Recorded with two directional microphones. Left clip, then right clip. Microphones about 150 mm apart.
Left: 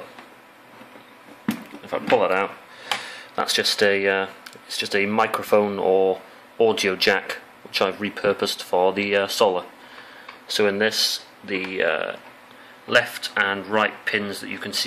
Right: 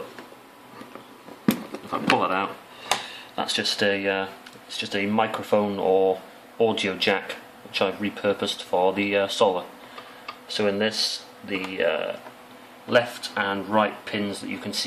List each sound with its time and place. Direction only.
1.9 s speech: 25° left (ahead or behind)